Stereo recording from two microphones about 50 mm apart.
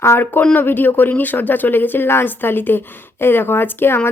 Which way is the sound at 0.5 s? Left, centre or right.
Left.